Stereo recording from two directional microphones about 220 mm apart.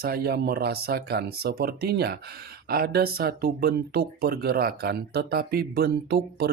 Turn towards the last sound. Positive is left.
turn(degrees=-45)  # may be behind; listen again after turning